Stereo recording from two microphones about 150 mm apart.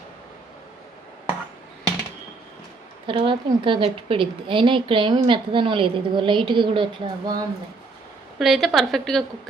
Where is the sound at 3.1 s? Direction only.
35° right (ahead or behind).